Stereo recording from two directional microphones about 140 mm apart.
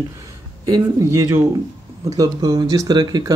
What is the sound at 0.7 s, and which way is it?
Speech, 25° right (ahead or behind).